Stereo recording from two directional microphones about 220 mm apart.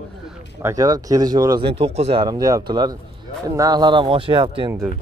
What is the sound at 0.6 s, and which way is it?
Speech, 15° right (ahead or behind).